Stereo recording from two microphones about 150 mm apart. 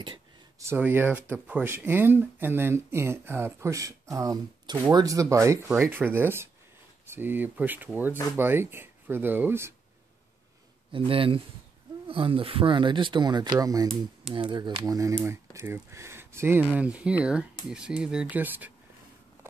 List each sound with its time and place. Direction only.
0.6 s speech: 15° right (ahead or behind)
10.9 s speech: 35° right (ahead or behind); by 18.7 s 10° right (ahead or behind)